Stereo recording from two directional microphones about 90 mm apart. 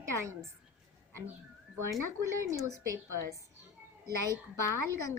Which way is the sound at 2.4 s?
40° right (ahead or behind).